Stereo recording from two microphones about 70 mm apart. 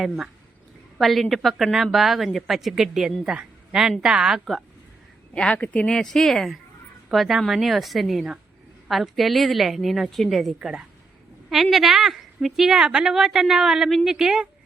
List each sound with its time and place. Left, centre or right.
0.9 s a woman's voice: centre
5.3 s speech: centre
5.9 s a woman's voice: centre